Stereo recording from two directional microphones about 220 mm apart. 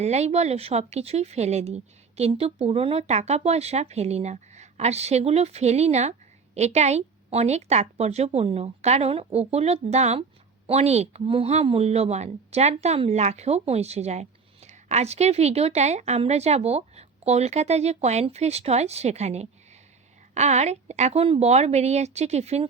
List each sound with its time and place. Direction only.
0.0 s speech: 30° right (ahead or behind)